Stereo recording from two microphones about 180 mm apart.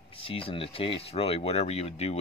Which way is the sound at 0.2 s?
30° left (ahead or behind).